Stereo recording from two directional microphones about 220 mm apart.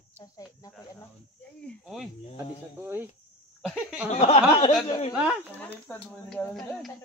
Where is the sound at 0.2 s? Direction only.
15° left (ahead or behind).